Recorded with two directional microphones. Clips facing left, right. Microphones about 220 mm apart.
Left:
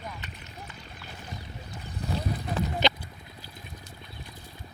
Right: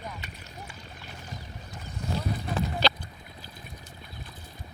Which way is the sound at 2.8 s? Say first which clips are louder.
Left 1 dB; 20° left (ahead or behind).